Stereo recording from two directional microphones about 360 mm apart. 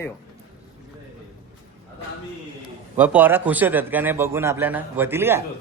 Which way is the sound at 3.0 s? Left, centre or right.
Centre.